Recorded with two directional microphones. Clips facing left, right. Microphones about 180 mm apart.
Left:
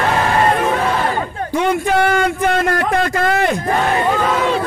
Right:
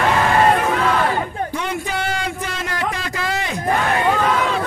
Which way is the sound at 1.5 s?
55° left (ahead or behind).